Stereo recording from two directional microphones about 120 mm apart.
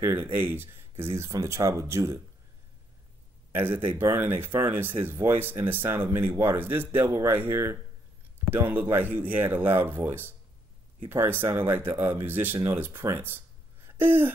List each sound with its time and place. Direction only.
0.0 s speech: 20° right (ahead or behind)
3.5 s speech: 20° right (ahead or behind)
13.8 s a sound: 15° right (ahead or behind)